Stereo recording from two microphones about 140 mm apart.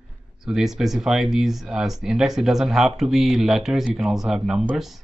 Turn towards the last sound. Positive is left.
turn(degrees=0)  # may be behind; listen again after turning